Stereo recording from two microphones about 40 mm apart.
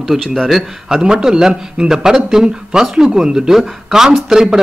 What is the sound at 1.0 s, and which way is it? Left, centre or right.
Speech, centre.